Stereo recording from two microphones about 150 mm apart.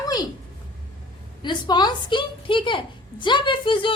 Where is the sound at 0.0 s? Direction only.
25° left (ahead or behind).